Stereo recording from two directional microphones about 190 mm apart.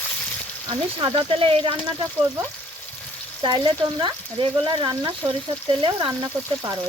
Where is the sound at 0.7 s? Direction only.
25° right (ahead or behind).